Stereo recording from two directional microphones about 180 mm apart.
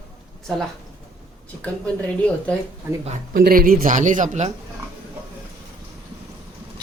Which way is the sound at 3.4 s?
50° right (ahead or behind).